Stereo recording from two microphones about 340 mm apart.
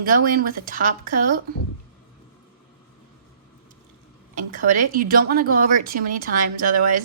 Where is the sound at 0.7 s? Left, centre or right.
Right.